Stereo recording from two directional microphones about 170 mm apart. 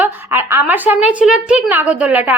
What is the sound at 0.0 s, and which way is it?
A woman's voice, 15° right (ahead or behind).